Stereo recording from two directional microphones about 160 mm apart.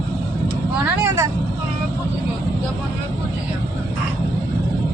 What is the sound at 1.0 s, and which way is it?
Vehicle, 20° right (ahead or behind).